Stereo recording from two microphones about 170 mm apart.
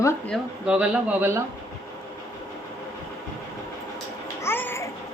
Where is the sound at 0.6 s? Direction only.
5° right (ahead or behind).